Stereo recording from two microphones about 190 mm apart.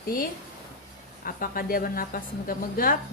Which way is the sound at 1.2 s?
50° left (ahead or behind).